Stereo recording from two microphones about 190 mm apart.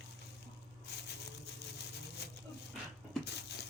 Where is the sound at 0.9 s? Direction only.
60° left (ahead or behind).